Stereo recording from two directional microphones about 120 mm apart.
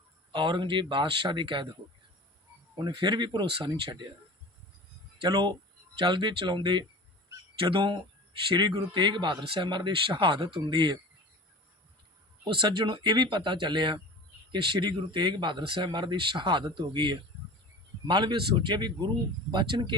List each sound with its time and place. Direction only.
0.3 s speech: 40° right (ahead or behind)
2.7 s speech: 40° right (ahead or behind)
5.2 s speech: 40° right (ahead or behind)
12.5 s speech: 45° right (ahead or behind)